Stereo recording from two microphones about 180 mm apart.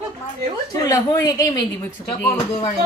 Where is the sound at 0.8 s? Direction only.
20° left (ahead or behind).